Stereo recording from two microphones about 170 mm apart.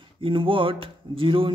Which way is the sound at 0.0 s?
30° right (ahead or behind).